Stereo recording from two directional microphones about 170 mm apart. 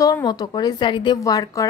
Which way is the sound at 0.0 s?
25° left (ahead or behind).